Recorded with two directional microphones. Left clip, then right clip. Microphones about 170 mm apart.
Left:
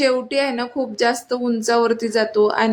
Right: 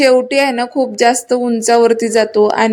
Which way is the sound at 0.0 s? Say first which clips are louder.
Right 8 dB; 25° right (ahead or behind).